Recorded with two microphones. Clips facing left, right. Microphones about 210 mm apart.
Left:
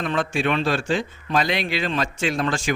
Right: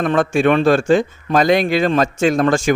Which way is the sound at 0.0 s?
50° right (ahead or behind).